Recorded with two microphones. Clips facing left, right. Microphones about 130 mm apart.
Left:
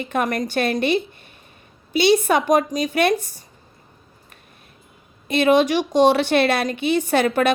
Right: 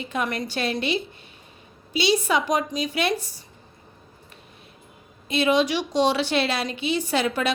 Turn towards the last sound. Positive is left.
turn(degrees=55)  # may be behind; listen again after turning